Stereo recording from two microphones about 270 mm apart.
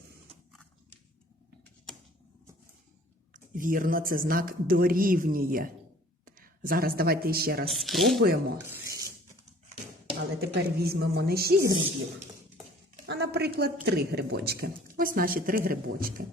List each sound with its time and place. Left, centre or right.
3.3 s speech: right
7.7 s speech: centre
8.2 s speech: right
8.7 s rub: centre
10.4 s speech: right
13.1 s a sound: right
13.8 s speech: right